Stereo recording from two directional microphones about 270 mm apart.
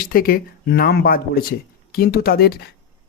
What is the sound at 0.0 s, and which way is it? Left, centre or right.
Speech, left.